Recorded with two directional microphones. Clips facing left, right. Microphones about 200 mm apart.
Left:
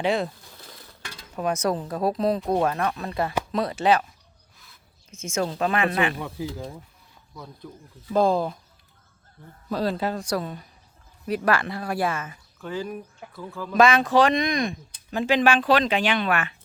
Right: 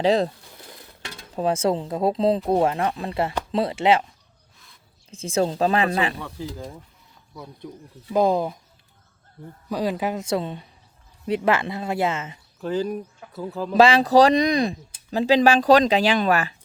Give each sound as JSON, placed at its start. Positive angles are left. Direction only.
{"t": 0.0, "sound": "speech", "side_deg": -35}
{"t": 0.5, "sound": "dishes", "side_deg": -20}
{"t": 2.5, "sound": "speech", "side_deg": -25}
{"t": 4.5, "sound": "a sound", "side_deg": 0}
{"t": 5.1, "sound": "speech", "side_deg": -35}
{"t": 6.5, "sound": "speech", "side_deg": 5}
{"t": 7.3, "sound": "speech", "side_deg": -15}
{"t": 9.6, "sound": "speech", "side_deg": -15}